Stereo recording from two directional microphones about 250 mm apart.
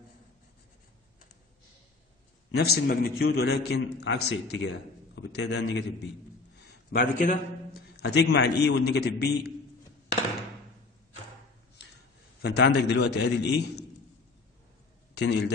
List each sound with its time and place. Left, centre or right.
2.5 s a man's voice: left
12.4 s a man's voice: left
15.1 s a man's voice: left